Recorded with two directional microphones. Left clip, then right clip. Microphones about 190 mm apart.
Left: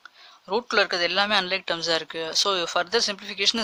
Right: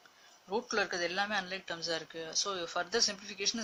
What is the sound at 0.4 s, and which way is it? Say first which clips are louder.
Speech: left 11 dB; 40° left (ahead or behind).